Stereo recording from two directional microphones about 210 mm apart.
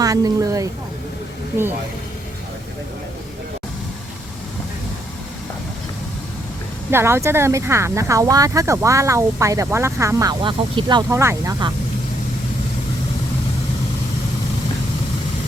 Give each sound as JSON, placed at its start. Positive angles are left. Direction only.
{"t": 0.0, "sound": "speech", "side_deg": -15}
{"t": 6.9, "sound": "speech", "side_deg": -10}